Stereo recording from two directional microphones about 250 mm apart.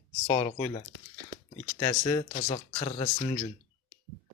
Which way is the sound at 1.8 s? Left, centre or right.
Centre.